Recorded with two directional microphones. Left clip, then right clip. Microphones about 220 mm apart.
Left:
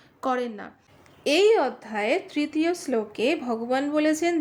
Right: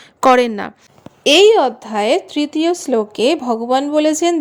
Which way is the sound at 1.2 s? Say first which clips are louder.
Right 10 dB; 35° right (ahead or behind).